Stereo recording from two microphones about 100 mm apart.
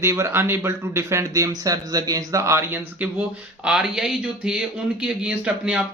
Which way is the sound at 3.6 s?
5° right (ahead or behind).